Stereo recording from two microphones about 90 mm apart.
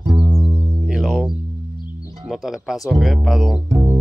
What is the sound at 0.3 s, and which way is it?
Music, 90° right.